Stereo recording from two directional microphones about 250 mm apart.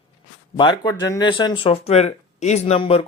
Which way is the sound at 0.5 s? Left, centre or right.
Centre.